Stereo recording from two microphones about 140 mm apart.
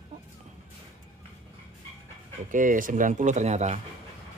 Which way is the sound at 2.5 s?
70° right (ahead or behind).